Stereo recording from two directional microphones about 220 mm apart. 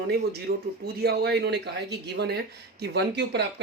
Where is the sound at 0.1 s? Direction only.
45° right (ahead or behind).